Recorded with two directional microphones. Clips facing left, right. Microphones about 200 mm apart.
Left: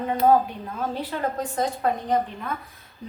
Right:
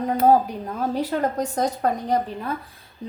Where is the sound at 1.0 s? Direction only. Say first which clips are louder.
Right 6 dB; 40° right (ahead or behind).